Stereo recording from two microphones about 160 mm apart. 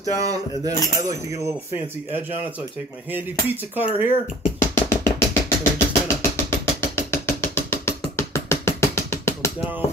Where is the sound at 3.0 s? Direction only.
10° right (ahead or behind).